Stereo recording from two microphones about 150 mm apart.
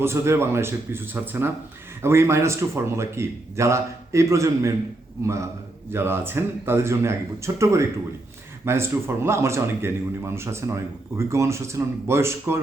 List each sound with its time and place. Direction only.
0.0 s a man's voice: 15° right (ahead or behind)